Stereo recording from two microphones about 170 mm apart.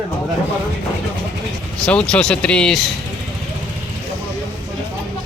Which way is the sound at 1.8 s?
5° left (ahead or behind).